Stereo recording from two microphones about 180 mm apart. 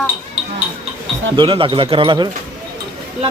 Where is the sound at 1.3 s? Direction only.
30° right (ahead or behind).